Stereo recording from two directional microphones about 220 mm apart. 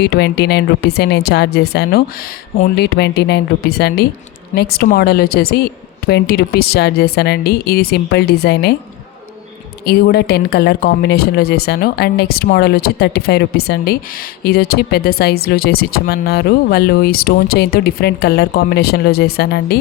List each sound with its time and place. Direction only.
0.0 s speech: 50° left (ahead or behind)
9.8 s speech: 45° left (ahead or behind)